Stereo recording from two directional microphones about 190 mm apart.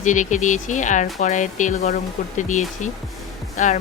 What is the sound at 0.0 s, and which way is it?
Speech, 40° left (ahead or behind).